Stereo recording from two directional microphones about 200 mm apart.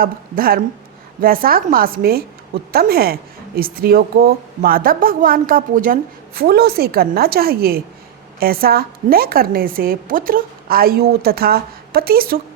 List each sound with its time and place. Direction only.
0.0 s speech: 45° right (ahead or behind)